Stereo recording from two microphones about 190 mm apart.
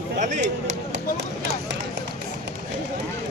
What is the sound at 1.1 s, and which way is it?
Chop, 65° right (ahead or behind).